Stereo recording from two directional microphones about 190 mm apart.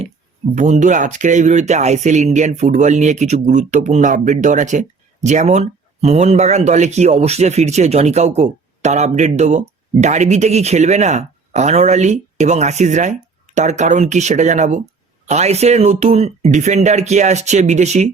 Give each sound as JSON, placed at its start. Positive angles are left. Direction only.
{"t": 0.5, "sound": "speech", "side_deg": -40}